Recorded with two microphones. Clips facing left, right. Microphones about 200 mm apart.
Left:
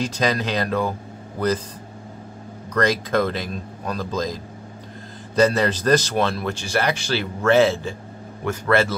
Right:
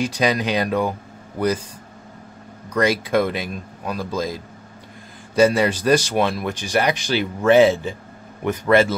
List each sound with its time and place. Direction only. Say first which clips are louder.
0.0 s speech: right 2 dB; 15° right (ahead or behind)
2.7 s speech: right 2 dB; 10° right (ahead or behind)